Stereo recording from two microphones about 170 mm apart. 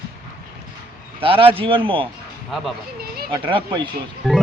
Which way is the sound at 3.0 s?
65° right (ahead or behind).